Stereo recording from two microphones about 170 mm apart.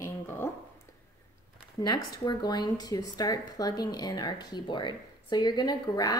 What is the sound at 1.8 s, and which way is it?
Speech, 25° left (ahead or behind).